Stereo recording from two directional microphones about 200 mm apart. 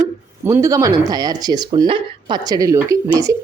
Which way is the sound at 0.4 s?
15° right (ahead or behind).